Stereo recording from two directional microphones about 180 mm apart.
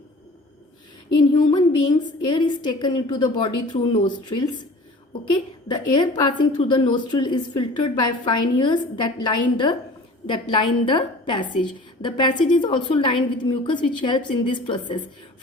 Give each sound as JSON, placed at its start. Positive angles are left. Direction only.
{"t": 2.2, "sound": "a woman's voice", "side_deg": 25}